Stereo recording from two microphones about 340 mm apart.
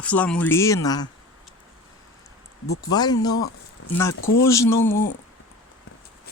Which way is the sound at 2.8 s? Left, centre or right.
Centre.